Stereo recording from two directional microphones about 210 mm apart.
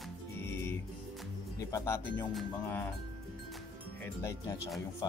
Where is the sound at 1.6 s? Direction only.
15° left (ahead or behind).